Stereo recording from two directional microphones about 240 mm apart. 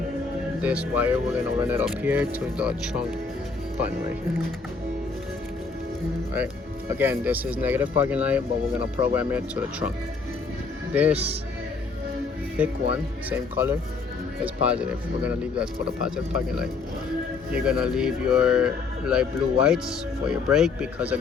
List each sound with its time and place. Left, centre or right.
0.6 s speech: centre
6.3 s speech: centre
11.1 s speech: right
13.3 s speech: centre